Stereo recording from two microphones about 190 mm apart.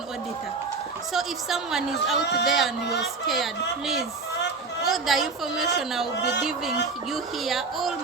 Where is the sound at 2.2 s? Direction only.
65° left (ahead or behind).